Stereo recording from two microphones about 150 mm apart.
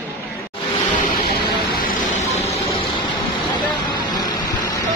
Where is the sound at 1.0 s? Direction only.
80° left.